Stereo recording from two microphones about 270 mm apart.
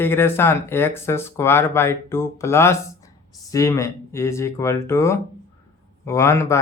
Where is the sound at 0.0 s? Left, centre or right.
Centre.